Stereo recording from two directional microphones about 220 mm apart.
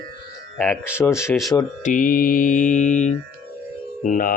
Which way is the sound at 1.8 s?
35° left (ahead or behind).